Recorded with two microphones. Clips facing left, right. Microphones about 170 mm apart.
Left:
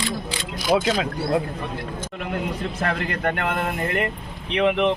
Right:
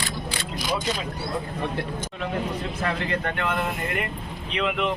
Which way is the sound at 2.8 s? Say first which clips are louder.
Left 3 dB; 55° left (ahead or behind).